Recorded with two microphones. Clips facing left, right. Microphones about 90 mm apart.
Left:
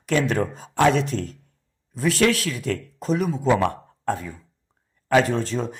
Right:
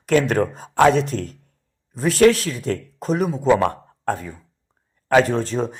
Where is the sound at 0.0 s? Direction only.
45° right (ahead or behind).